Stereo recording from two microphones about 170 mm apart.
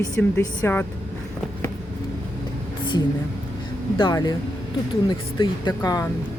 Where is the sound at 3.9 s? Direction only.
25° left (ahead or behind).